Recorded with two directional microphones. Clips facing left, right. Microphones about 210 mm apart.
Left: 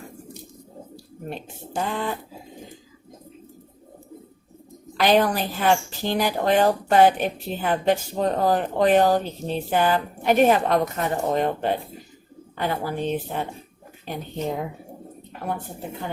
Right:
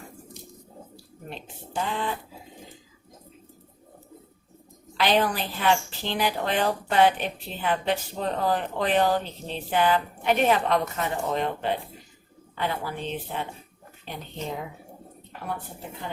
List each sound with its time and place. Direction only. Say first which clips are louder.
1.3 s a woman's voice: left 4 dB; 45° left (ahead or behind)
4.9 s a woman's voice: left 4 dB; 45° left (ahead or behind)